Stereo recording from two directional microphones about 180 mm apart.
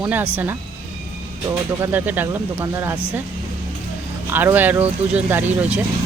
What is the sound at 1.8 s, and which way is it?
Speech, 10° right (ahead or behind).